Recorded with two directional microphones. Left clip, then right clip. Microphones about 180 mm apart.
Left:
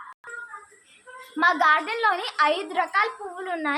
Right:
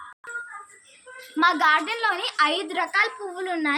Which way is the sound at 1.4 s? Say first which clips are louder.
Even; centre (ahead or behind).